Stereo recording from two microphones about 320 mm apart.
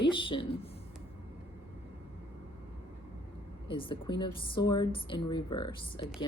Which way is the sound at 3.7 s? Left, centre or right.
Centre.